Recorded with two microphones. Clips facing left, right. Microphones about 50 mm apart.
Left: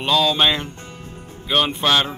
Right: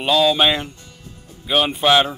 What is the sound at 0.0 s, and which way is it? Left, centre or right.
Speech, centre.